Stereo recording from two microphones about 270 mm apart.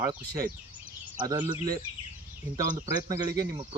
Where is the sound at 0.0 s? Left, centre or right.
Centre.